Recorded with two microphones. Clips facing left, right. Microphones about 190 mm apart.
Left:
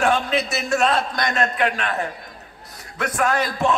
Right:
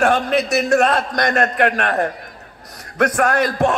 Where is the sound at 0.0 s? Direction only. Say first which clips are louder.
Right 4 dB; 60° right (ahead or behind).